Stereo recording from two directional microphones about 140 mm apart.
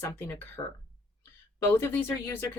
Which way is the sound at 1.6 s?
15° left (ahead or behind).